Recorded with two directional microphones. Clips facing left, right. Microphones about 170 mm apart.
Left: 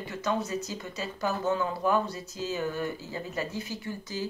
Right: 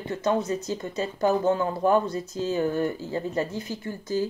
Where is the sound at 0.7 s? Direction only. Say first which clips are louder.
Right 7 dB; 20° right (ahead or behind).